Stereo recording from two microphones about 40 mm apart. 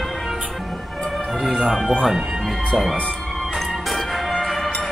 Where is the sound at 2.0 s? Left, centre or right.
Centre.